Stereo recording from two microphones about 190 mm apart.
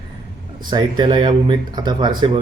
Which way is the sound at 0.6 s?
20° right (ahead or behind).